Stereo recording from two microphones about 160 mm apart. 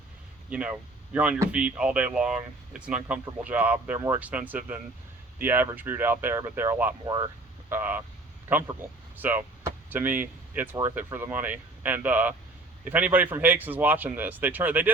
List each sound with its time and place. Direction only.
0.5 s speech: 10° right (ahead or behind)
7.0 s speech: 25° right (ahead or behind)
7.7 s speech: 10° right (ahead or behind)